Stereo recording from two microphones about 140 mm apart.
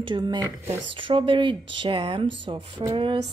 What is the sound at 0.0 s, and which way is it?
Speech, 35° right (ahead or behind).